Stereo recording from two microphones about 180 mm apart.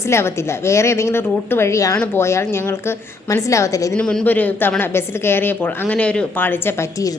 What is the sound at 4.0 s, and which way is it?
A woman's voice, 5° left (ahead or behind).